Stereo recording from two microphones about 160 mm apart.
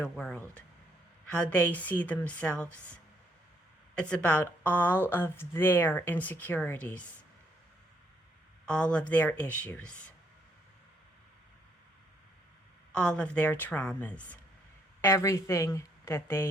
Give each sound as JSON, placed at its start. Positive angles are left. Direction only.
{"t": 0.0, "sound": "speech", "side_deg": 10}
{"t": 3.9, "sound": "speech", "side_deg": 5}
{"t": 8.6, "sound": "speech", "side_deg": 5}
{"t": 12.9, "sound": "speech", "side_deg": 5}